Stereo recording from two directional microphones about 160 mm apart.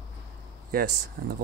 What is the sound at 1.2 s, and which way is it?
Speech, 90° right.